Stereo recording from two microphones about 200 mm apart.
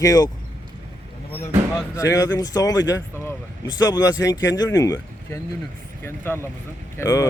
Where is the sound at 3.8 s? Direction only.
20° left (ahead or behind).